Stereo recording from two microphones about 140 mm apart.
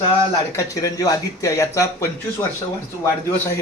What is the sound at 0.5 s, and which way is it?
A man's voice, 25° left (ahead or behind).